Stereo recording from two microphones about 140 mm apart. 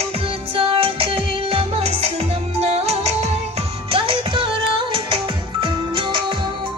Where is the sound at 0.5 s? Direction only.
40° right (ahead or behind).